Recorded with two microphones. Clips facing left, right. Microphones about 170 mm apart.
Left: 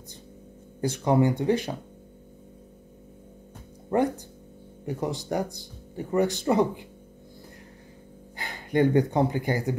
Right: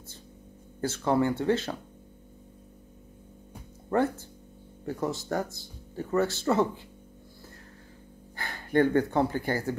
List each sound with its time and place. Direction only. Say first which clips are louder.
0.7 s speech: left 3 dB; 15° left (ahead or behind)
4.8 s speech: left 1 dB; 15° left (ahead or behind)
8.4 s speech: left 1 dB; 15° left (ahead or behind)